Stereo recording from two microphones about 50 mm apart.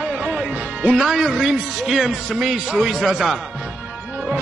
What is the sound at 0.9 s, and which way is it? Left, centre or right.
Speech, centre.